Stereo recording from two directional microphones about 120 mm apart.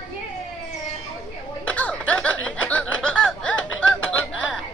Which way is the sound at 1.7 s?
10° left (ahead or behind).